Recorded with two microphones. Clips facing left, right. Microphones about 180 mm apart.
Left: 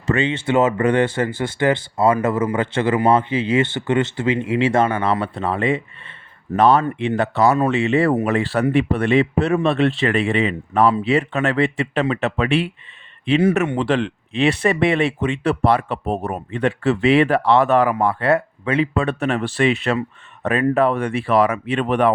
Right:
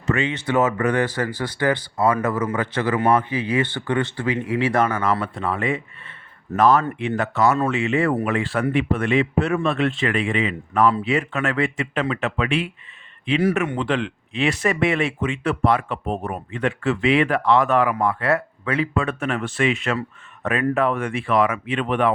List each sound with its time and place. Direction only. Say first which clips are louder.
0.1 s speech: left 3 dB; 30° left (ahead or behind)